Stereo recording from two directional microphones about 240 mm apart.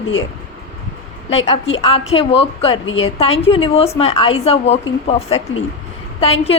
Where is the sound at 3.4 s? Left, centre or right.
Left.